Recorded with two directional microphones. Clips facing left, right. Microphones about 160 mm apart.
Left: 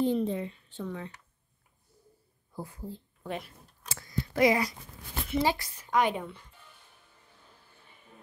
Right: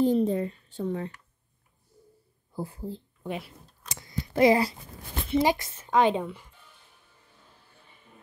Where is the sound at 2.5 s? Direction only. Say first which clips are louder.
Right 5 dB; 30° right (ahead or behind).